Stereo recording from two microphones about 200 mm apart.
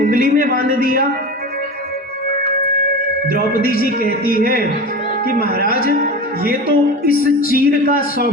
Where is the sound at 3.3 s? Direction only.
50° left (ahead or behind).